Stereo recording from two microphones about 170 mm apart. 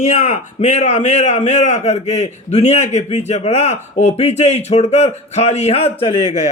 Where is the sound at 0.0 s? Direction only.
45° left (ahead or behind).